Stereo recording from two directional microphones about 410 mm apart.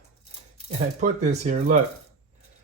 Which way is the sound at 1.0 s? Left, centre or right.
Centre.